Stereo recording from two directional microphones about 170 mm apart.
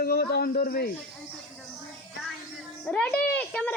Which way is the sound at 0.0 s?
65° left (ahead or behind).